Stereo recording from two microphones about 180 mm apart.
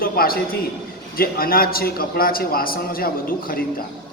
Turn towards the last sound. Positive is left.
turn(degrees=55)  # may be behind; listen again after turning